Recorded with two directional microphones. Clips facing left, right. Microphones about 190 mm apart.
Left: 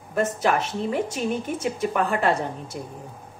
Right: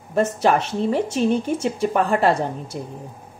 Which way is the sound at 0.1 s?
30° right (ahead or behind).